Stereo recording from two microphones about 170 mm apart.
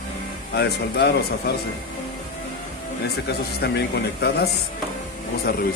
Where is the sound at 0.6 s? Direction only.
70° left (ahead or behind).